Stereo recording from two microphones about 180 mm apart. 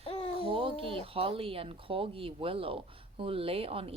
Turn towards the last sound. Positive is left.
turn(degrees=-30)  # may be behind; listen again after turning